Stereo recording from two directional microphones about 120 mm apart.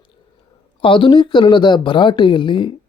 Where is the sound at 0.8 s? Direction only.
45° left (ahead or behind).